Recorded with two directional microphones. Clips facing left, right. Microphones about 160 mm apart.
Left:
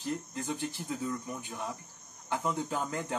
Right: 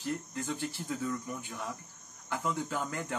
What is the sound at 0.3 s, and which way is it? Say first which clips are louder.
Speech: even; 20° left (ahead or behind).